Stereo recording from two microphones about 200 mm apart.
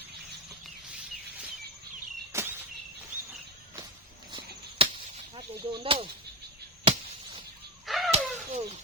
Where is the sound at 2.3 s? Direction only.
15° right (ahead or behind).